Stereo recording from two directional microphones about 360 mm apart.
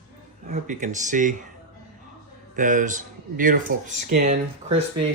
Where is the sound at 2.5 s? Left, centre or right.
Right.